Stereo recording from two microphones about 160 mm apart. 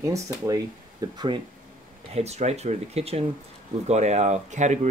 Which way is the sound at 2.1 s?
40° right (ahead or behind).